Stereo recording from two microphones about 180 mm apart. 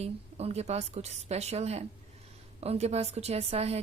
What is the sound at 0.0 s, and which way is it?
A woman's voice, 35° right (ahead or behind).